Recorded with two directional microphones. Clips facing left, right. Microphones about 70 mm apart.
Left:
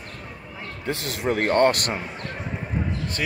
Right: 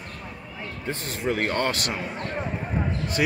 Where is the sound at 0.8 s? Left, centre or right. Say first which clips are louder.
Left 3 dB; left.